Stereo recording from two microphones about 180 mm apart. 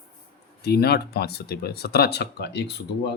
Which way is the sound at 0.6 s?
60° left (ahead or behind).